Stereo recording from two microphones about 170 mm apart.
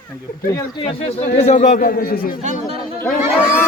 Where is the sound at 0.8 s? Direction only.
35° left (ahead or behind); by 2.3 s 60° left (ahead or behind).